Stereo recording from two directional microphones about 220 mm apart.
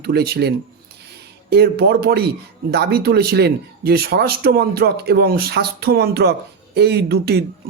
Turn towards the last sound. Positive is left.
turn(degrees=-45)  # may be behind; listen again after turning